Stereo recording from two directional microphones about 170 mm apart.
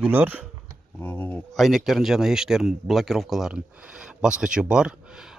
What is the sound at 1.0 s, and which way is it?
Speech, 10° left (ahead or behind).